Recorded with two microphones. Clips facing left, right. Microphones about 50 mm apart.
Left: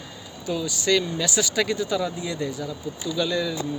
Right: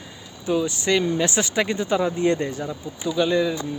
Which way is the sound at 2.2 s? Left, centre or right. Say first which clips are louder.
Right 7 dB; right.